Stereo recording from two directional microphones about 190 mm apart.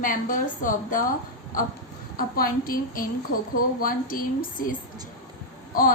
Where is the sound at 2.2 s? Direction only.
50° left (ahead or behind).